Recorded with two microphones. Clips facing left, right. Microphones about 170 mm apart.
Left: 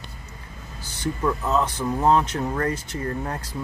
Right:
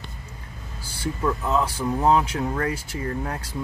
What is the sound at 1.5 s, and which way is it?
A man's voice, 10° right (ahead or behind).